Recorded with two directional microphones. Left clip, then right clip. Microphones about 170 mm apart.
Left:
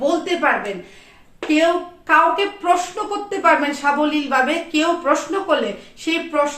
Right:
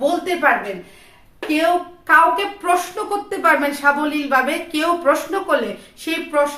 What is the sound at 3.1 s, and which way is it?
A woman's voice, 20° right (ahead or behind).